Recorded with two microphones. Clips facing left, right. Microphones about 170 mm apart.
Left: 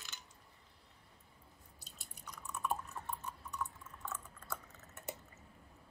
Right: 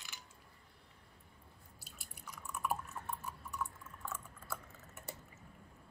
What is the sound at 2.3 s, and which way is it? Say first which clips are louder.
Drip: even; centre (ahead or behind).